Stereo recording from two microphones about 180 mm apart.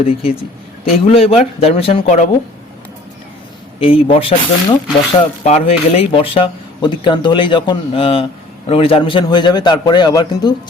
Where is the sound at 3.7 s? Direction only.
30° left (ahead or behind).